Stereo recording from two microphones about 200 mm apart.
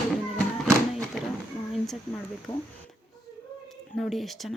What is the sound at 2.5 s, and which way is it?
Speech, 25° left (ahead or behind).